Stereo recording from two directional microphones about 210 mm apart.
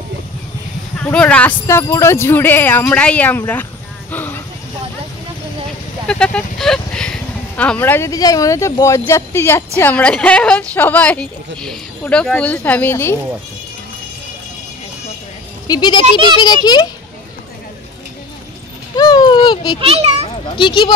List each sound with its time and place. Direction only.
1.0 s speech: 5° left (ahead or behind)
4.1 s a sound: 10° left (ahead or behind)
6.0 s speech: 5° left (ahead or behind)
15.6 s a child's voice: 20° left (ahead or behind)
18.9 s a sound: 20° left (ahead or behind)
19.8 s a child's voice: 30° right (ahead or behind)
20.5 s a child's voice: 25° left (ahead or behind)